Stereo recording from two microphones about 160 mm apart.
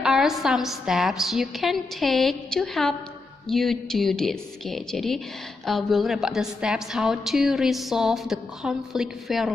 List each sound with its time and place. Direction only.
0.0 s a woman's voice: 5° right (ahead or behind)